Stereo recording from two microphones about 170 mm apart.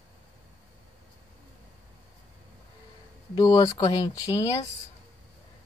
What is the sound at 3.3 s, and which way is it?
Speech, 25° left (ahead or behind).